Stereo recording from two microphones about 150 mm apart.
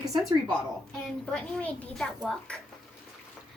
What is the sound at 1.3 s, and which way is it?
A woman's voice, 5° left (ahead or behind).